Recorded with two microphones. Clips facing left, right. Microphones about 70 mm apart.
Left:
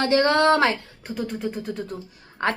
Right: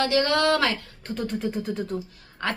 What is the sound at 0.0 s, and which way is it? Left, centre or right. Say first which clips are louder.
Speech: left 3 dB; left.